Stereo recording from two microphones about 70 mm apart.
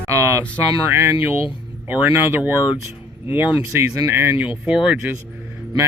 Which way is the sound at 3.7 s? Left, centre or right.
Right.